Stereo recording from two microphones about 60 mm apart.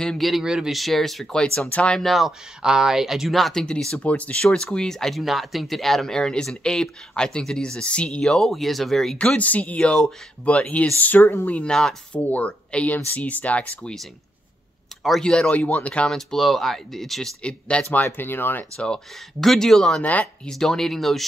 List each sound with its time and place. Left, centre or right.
0.2 s speech: centre; by 2.0 s left
2.0 s speech: centre
3.6 s speech: centre
4.5 s speech: centre
9.4 s speech: left
11.6 s speech: centre
15.2 s speech: centre
16.1 s speech: centre
17.4 s speech: centre
17.8 s speech: left
19.4 s speech: centre
20.0 s speech: left
20.4 s speech: centre